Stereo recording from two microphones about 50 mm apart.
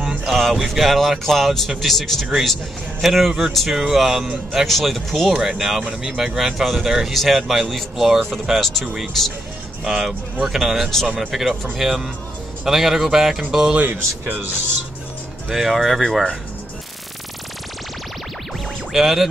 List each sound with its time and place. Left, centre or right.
0.3 s speech: centre
9.8 s speech: centre
10.9 s speech: centre
14.2 s speech: right
15.5 s speech: centre
18.9 s speech: centre